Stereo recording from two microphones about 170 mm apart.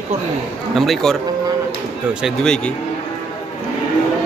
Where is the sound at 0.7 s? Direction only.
Centre (ahead or behind).